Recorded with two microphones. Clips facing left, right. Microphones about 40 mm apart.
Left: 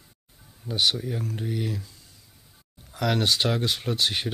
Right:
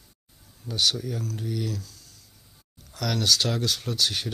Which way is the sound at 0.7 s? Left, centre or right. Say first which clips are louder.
Left 1 dB; centre.